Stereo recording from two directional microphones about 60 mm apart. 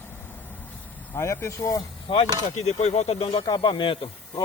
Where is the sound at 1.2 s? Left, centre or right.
Left.